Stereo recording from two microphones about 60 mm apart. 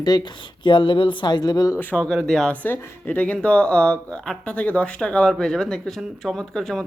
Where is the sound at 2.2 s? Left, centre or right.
Centre.